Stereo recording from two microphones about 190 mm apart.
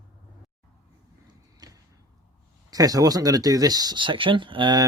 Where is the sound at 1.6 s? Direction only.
20° right (ahead or behind).